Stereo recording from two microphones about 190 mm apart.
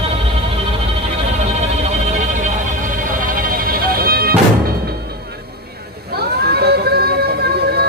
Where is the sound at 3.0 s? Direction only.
45° right (ahead or behind).